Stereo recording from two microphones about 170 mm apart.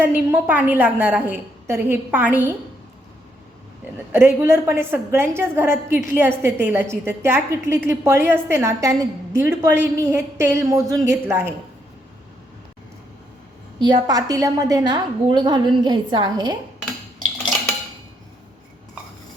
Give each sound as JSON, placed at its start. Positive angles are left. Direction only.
{"t": 0.0, "sound": "a woman's voice", "side_deg": -10}
{"t": 3.9, "sound": "a woman's voice", "side_deg": -15}
{"t": 13.7, "sound": "a woman's voice", "side_deg": -25}